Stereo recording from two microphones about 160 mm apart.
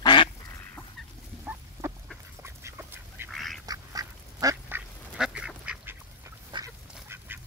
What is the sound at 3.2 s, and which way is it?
Duck, centre (ahead or behind).